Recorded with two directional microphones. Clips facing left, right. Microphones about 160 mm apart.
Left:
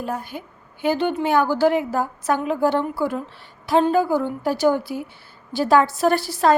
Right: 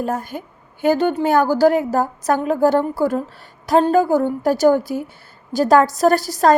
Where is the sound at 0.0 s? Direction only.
45° right (ahead or behind).